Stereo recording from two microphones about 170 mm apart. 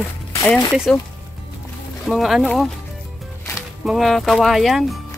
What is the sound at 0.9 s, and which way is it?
Speech, centre (ahead or behind).